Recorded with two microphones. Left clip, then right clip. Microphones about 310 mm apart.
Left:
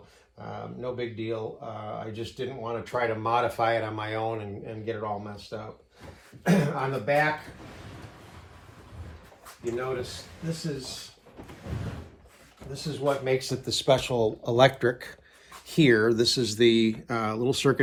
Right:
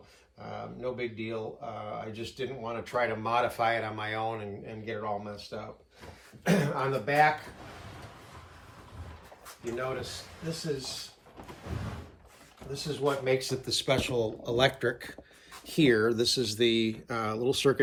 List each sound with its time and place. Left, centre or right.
0.3 s speech: centre
12.7 s speech: centre
14.5 s speech: centre